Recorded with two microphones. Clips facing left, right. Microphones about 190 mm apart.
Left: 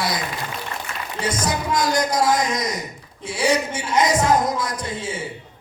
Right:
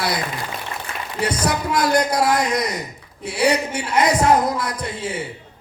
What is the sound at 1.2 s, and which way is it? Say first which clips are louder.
A man's voice: right 1 dB; 60° right (ahead or behind).